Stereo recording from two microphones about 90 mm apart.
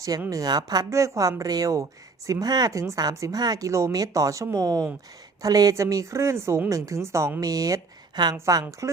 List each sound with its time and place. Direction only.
0.3 s speech: 45° right (ahead or behind)
0.9 s a woman's voice: 35° right (ahead or behind)
7.4 s speech: 45° right (ahead or behind)
8.8 s speech: 35° right (ahead or behind)